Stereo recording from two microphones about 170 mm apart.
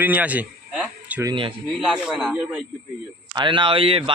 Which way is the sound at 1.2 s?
30° right (ahead or behind).